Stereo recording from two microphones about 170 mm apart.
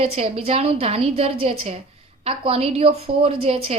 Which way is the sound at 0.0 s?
35° right (ahead or behind).